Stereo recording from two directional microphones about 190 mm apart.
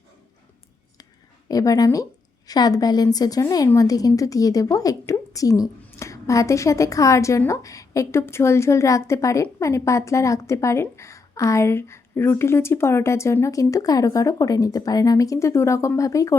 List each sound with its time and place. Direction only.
1.5 s a woman's voice: 20° left (ahead or behind)